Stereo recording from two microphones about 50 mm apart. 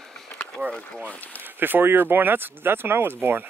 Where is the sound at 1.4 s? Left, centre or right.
Right.